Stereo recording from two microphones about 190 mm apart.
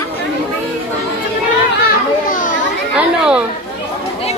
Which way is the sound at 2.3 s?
45° left (ahead or behind).